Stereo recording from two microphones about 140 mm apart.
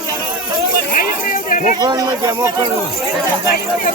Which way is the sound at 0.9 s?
75° left (ahead or behind).